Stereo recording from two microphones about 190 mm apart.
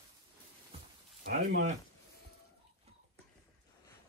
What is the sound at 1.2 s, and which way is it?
Speech, 50° right (ahead or behind).